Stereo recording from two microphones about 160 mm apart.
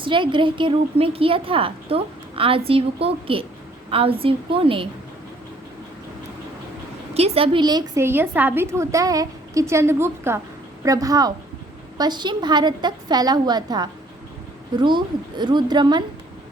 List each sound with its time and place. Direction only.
0.0 s a woman's voice: 30° right (ahead or behind)
7.1 s a woman's voice: 40° right (ahead or behind)
8.0 s a woman's voice: 10° right (ahead or behind)